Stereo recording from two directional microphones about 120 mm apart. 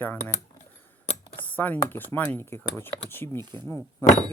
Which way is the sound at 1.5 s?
15° left (ahead or behind).